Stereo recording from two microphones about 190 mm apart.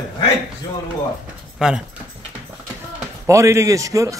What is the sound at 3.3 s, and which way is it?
Speech, 15° right (ahead or behind).